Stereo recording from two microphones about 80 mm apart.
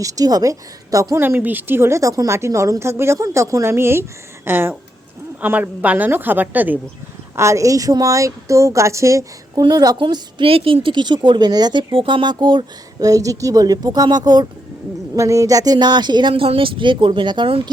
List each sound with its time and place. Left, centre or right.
0.0 s speech: right
1.1 s a woman's voice: right
7.3 s a woman's voice: right
9.6 s a woman's voice: right
10.0 s a woman's voice: right
13.0 s speech: right
15.1 s speech: right